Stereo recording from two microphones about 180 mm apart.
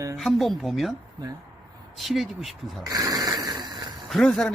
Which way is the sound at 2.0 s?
Centre (ahead or behind).